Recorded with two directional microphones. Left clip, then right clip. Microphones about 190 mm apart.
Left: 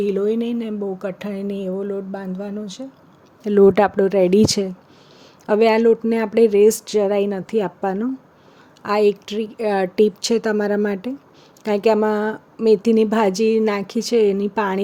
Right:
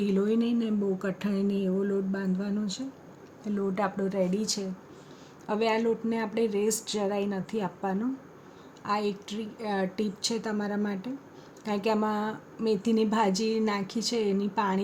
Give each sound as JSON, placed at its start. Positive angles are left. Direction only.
{"t": 0.0, "sound": "a woman's voice", "side_deg": 35}
{"t": 3.4, "sound": "a woman's voice", "side_deg": 55}